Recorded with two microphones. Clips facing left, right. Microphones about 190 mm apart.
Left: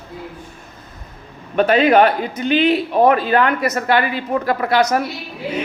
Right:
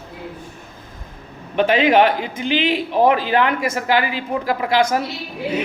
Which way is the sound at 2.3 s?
90° right.